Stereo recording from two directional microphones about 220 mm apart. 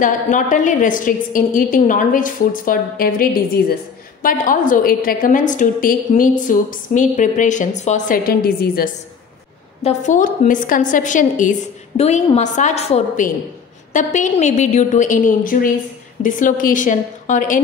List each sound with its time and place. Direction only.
0.0 s a woman's voice: 35° left (ahead or behind)